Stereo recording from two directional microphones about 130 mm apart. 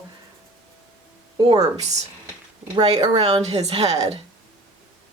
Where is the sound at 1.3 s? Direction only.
30° right (ahead or behind).